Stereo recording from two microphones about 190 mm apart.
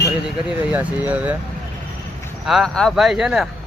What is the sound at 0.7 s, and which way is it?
Speech, 10° right (ahead or behind).